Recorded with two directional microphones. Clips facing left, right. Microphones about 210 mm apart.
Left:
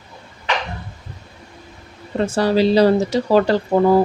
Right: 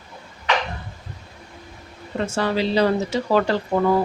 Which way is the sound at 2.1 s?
35° left (ahead or behind).